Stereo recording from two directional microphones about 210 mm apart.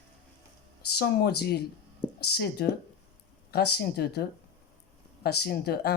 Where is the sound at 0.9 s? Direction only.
50° left (ahead or behind).